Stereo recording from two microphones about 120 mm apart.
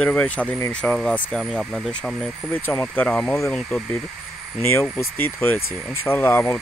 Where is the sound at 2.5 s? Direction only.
15° left (ahead or behind).